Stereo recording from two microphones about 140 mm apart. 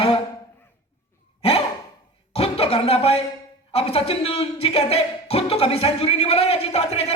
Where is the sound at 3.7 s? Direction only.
45° left (ahead or behind).